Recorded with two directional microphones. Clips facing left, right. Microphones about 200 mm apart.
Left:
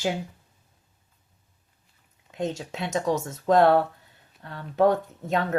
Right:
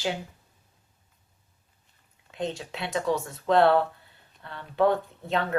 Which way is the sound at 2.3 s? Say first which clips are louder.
Left 2 dB; 45° left (ahead or behind).